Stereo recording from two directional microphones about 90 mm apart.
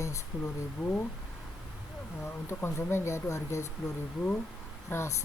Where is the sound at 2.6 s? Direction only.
30° left (ahead or behind).